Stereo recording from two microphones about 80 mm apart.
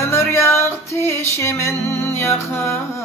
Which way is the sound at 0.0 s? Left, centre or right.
Left.